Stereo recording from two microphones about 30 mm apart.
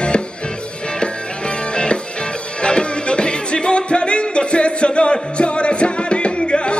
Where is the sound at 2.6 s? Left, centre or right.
Left.